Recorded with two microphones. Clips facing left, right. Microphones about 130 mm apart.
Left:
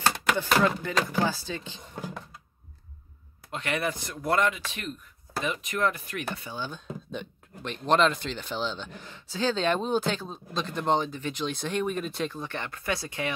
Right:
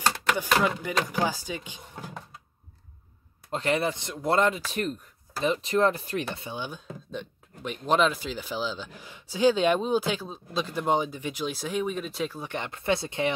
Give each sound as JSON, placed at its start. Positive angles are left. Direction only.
{"t": 0.4, "sound": "speech", "side_deg": -10}
{"t": 3.5, "sound": "speech", "side_deg": -30}
{"t": 6.3, "sound": "speech", "side_deg": -20}
{"t": 7.1, "sound": "speech", "side_deg": -5}